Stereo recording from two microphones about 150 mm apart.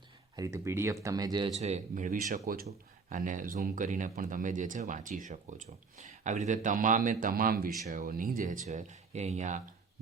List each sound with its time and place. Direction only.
0.3 s speech: 20° right (ahead or behind)
1.5 s speech: 45° right (ahead or behind)